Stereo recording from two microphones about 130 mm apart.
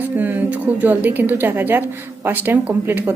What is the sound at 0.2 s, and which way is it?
A woman's voice, 15° right (ahead or behind).